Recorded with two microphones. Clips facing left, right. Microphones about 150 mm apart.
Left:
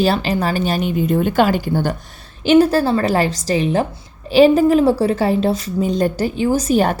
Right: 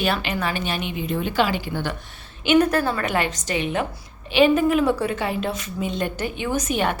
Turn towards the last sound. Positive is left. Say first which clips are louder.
# left 7 dB
turn(degrees=40)  # may be behind; listen again after turning